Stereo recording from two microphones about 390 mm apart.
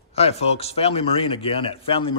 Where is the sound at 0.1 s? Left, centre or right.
Centre.